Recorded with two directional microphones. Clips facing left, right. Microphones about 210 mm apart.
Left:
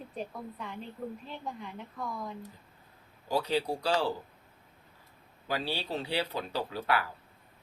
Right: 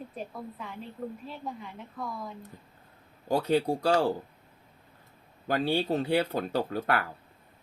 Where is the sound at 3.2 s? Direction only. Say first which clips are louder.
Right 4 dB; 50° right (ahead or behind).